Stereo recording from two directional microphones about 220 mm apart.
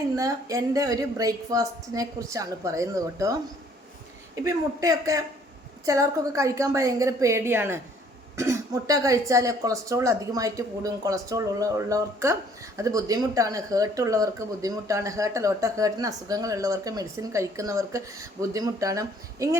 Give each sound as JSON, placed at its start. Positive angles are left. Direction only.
{"t": 0.2, "sound": "speech", "side_deg": -15}
{"t": 4.4, "sound": "speech", "side_deg": -15}